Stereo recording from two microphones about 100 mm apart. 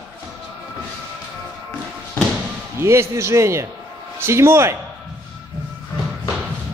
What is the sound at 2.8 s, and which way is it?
A man's voice, 25° right (ahead or behind).